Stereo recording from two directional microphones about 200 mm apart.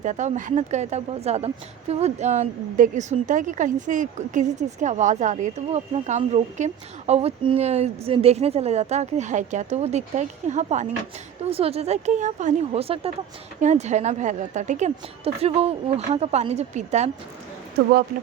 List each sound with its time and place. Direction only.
0.0 s a woman's voice: 35° right (ahead or behind)